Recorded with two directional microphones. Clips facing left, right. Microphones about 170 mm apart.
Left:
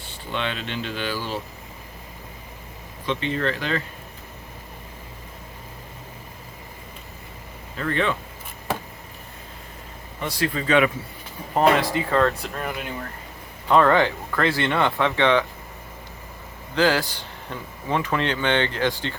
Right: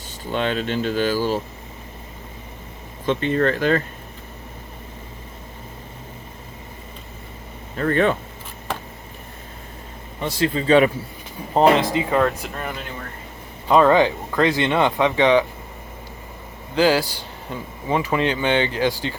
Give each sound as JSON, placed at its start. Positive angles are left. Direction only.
{"t": 0.1, "sound": "speech", "side_deg": -40}
{"t": 3.1, "sound": "speech", "side_deg": -45}
{"t": 7.8, "sound": "speech", "side_deg": -45}
{"t": 10.2, "sound": "speech", "side_deg": -25}
{"t": 12.4, "sound": "speech", "side_deg": 0}
{"t": 13.7, "sound": "speech", "side_deg": -15}
{"t": 16.7, "sound": "speech", "side_deg": -10}